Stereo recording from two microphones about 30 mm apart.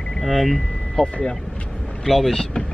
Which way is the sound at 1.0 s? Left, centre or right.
Left.